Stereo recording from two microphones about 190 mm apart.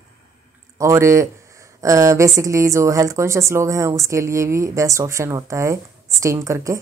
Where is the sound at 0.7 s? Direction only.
15° right (ahead or behind).